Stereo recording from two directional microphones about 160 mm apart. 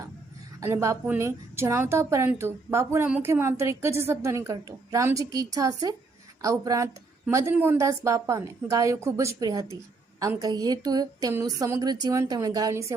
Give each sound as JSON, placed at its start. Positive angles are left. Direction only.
{"t": 0.6, "sound": "a woman's voice", "side_deg": -20}